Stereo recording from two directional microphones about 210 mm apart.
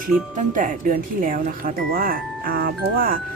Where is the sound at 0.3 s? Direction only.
40° right (ahead or behind).